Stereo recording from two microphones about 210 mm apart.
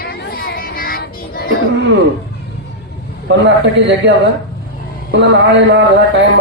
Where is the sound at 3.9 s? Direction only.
55° right (ahead or behind).